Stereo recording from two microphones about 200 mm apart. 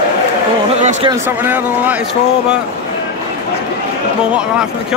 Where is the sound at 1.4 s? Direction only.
10° right (ahead or behind).